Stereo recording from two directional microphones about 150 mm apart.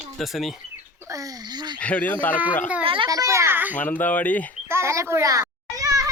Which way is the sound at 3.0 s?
20° right (ahead or behind).